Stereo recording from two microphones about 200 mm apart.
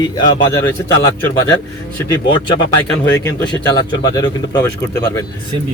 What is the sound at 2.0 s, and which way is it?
Speech, 20° left (ahead or behind).